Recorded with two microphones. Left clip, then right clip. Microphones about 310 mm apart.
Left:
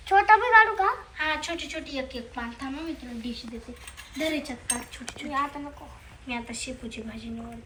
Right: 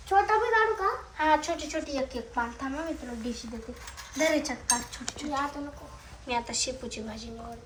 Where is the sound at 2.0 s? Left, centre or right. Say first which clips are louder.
Right 4 dB; centre.